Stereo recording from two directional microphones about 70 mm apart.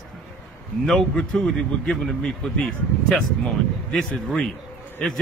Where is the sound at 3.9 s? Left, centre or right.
Centre.